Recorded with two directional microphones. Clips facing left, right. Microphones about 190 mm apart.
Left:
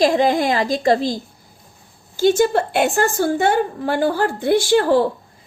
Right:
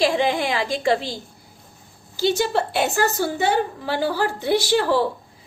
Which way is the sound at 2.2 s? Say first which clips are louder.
Left 5 dB; 50° left (ahead or behind).